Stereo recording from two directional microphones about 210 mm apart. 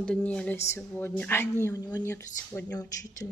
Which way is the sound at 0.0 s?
5° left (ahead or behind).